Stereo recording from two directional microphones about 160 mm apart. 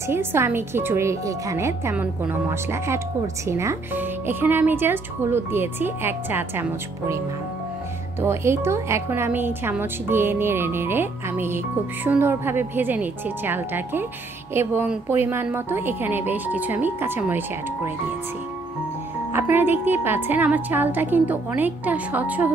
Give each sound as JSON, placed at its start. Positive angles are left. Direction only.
{"t": 0.1, "sound": "a woman's voice", "side_deg": -15}
{"t": 8.2, "sound": "a woman's voice", "side_deg": -15}
{"t": 19.3, "sound": "a woman's voice", "side_deg": -10}